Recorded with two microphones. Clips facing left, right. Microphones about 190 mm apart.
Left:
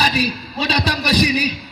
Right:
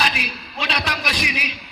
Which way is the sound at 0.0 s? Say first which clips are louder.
Left 6 dB; 35° left (ahead or behind).